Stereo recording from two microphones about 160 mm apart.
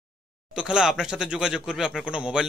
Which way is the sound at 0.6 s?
5° right (ahead or behind).